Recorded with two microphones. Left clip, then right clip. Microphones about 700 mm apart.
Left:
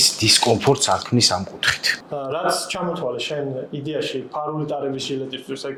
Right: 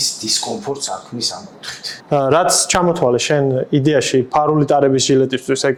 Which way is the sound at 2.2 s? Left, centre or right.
Right.